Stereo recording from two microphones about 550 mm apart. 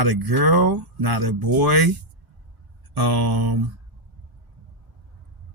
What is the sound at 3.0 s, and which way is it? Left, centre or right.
Speech, right.